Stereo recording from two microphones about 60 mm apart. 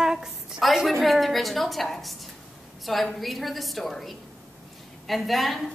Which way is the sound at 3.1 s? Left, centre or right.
Centre.